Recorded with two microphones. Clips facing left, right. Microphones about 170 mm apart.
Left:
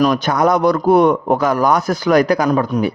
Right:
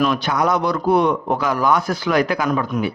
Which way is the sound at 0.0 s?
45° left (ahead or behind).